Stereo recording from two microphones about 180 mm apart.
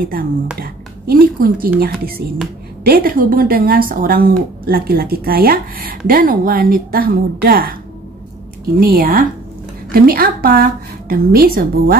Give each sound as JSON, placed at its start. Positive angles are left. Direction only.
{"t": 0.6, "sound": "a woman's voice", "side_deg": -55}
{"t": 8.7, "sound": "a woman's voice", "side_deg": -55}